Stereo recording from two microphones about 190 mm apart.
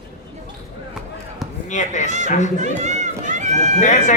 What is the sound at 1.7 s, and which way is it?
Speech, 40° left (ahead or behind).